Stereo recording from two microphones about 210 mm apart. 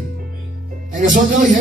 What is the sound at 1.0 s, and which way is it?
Speech, 40° right (ahead or behind).